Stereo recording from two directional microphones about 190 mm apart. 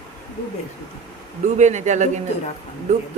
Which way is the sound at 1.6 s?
40° right (ahead or behind).